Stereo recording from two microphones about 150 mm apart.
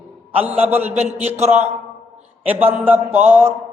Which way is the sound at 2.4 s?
10° right (ahead or behind).